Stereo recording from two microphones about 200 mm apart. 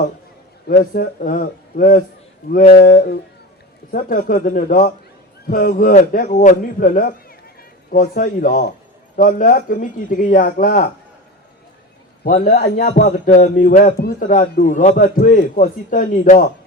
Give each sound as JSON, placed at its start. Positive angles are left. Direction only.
{"t": 0.7, "sound": "a man's voice", "side_deg": 45}
{"t": 12.2, "sound": "a man's voice", "side_deg": 50}